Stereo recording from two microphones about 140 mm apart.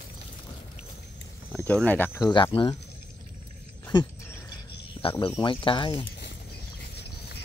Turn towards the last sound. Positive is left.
turn(degrees=35)  # may be behind; listen again after turning